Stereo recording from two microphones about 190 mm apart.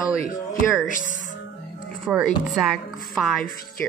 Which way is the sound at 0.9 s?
45° left (ahead or behind).